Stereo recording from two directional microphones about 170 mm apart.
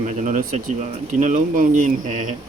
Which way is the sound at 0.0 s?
45° right (ahead or behind).